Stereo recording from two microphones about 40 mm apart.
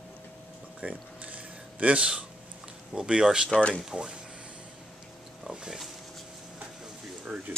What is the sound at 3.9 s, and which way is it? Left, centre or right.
Speech, right.